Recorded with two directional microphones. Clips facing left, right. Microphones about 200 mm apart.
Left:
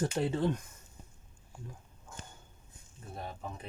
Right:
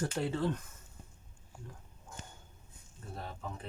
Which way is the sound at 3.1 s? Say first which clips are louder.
Left 2 dB; 15° left (ahead or behind).